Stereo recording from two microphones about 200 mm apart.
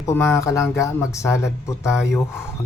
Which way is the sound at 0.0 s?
15° left (ahead or behind).